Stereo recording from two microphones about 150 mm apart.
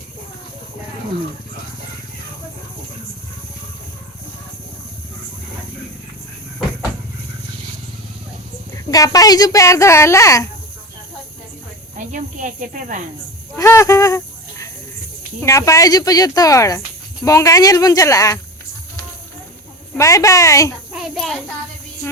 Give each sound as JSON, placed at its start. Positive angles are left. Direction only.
{"t": 8.9, "sound": "speech", "side_deg": 25}
{"t": 11.9, "sound": "cricket", "side_deg": -60}
{"t": 13.6, "sound": "speech", "side_deg": 20}
{"t": 15.4, "sound": "speech", "side_deg": 20}
{"t": 20.0, "sound": "speech", "side_deg": 20}
{"t": 20.9, "sound": "child singing", "side_deg": 0}